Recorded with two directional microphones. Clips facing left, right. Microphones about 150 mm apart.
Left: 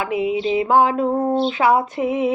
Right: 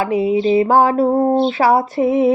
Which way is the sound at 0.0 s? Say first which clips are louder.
Right 5 dB; 40° right (ahead or behind).